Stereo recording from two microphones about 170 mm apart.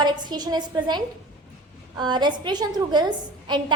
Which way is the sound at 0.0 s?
25° right (ahead or behind).